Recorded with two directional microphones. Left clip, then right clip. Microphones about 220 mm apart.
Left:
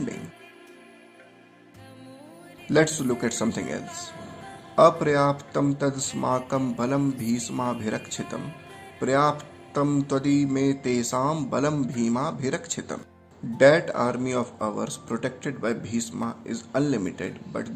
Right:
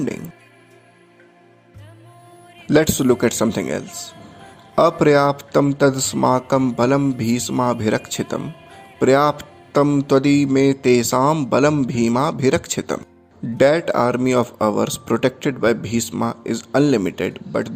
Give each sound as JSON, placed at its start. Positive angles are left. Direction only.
{"t": 2.6, "sound": "speech", "side_deg": -35}